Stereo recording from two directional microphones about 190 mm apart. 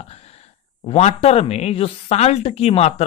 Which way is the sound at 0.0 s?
35° left (ahead or behind).